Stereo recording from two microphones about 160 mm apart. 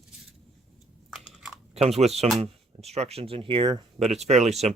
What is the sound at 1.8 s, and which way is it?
Speech, 40° right (ahead or behind).